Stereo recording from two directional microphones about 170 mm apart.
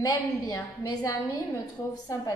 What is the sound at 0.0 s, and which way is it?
A woman's voice, 20° left (ahead or behind).